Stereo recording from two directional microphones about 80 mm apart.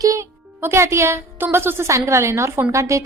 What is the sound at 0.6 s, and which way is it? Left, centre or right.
A woman's voice, right.